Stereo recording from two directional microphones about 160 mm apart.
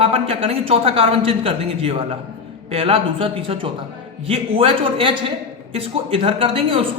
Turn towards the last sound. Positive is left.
turn(degrees=-35)  # may be behind; listen again after turning